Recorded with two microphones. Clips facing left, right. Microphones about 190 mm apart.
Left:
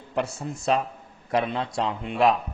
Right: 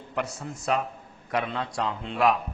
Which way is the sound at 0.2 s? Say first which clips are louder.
Left 4 dB; 25° left (ahead or behind).